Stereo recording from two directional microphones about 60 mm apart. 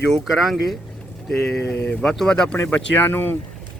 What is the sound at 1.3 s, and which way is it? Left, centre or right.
Speech, centre.